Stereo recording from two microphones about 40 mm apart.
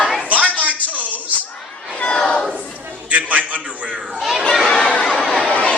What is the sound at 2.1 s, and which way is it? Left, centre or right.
Crowd, left.